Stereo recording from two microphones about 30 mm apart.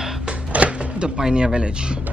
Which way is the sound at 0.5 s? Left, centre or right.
Right.